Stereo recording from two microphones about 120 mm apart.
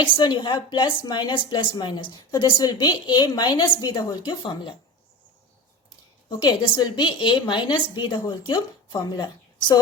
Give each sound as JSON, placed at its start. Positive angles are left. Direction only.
{"t": 0.0, "sound": "a woman's voice", "side_deg": 40}
{"t": 6.2, "sound": "a woman's voice", "side_deg": 35}